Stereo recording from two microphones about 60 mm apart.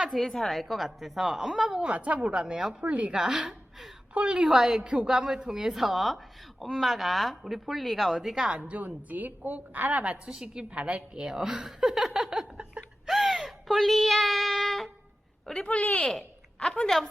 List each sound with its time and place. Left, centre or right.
0.0 s a sound: centre
0.3 s a woman's voice: centre
1.8 s a woman's voice: right
4.4 s a woman's voice: centre
8.4 s a woman's voice: right
13.1 s a sound: centre
15.4 s speech: centre
15.7 s speech: left
16.1 s a woman's voice: centre